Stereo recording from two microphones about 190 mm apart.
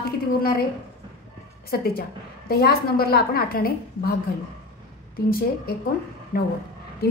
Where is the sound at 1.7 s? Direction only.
55° left (ahead or behind).